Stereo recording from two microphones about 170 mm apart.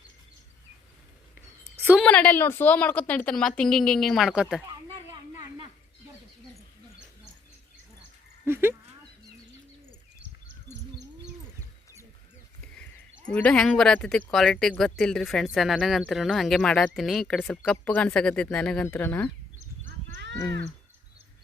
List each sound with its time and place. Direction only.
2.0 s speech: 5° left (ahead or behind)
4.7 s a sound: 20° right (ahead or behind)
8.4 s speech: 15° right (ahead or behind)
13.2 s speech: 5° left (ahead or behind)